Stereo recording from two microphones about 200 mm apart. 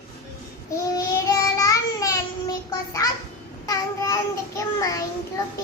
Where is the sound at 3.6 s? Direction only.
20° left (ahead or behind).